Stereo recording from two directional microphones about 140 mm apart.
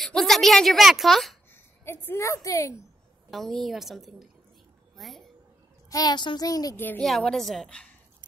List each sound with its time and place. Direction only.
0.0 s a woman's voice: centre (ahead or behind)
1.5 s speech: 15° left (ahead or behind)
3.3 s a woman's voice: centre (ahead or behind)
5.9 s a child's voice: 30° left (ahead or behind)
7.0 s a woman's voice: 5° left (ahead or behind)